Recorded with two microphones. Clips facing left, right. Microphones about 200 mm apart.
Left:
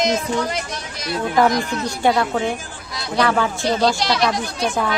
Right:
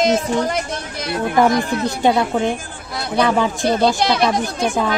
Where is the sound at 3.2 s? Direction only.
20° right (ahead or behind).